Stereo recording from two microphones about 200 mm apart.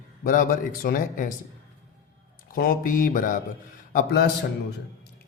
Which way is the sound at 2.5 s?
45° left (ahead or behind).